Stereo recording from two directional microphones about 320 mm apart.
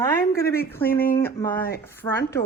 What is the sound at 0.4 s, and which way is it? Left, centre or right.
Speech, left.